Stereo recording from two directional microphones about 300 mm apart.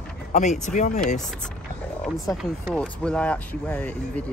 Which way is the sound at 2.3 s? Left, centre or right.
Centre.